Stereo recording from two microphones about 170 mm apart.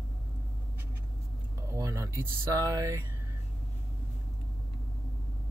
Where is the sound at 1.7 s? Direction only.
20° right (ahead or behind).